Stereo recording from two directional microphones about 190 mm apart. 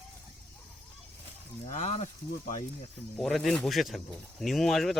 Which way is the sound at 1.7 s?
35° left (ahead or behind).